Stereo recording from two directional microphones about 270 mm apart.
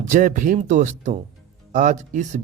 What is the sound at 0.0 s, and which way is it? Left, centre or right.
Speech, right.